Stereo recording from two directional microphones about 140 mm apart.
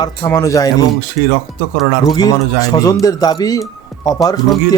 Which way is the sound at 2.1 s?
25° left (ahead or behind).